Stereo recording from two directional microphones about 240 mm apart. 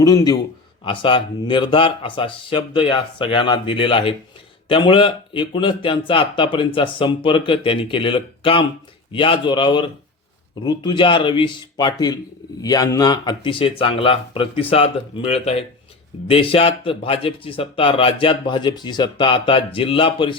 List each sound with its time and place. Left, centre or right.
0.0 s a man's voice: centre